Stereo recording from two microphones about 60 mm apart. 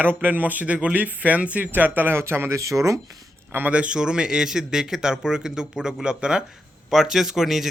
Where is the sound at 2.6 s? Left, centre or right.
Right.